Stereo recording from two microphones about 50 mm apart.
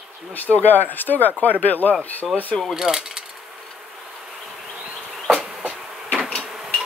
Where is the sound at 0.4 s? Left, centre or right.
Left.